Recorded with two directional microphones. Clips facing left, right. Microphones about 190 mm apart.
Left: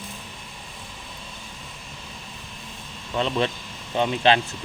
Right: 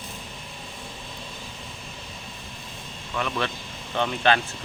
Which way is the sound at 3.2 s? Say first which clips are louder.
Left 4 dB; 20° left (ahead or behind).